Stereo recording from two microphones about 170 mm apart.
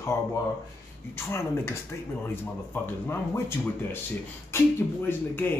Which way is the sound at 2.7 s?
15° left (ahead or behind).